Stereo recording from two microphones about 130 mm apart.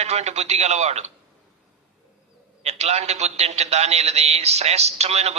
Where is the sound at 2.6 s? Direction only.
55° right (ahead or behind).